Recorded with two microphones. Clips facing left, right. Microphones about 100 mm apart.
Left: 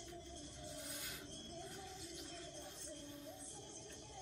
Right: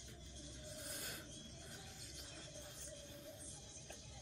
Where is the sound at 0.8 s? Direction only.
50° right (ahead or behind).